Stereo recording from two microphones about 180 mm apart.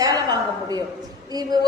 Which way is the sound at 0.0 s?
20° right (ahead or behind).